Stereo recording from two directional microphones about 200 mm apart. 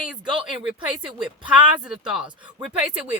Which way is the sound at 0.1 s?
5° right (ahead or behind).